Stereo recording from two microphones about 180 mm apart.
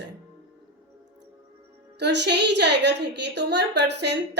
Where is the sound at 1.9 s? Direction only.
70° right (ahead or behind).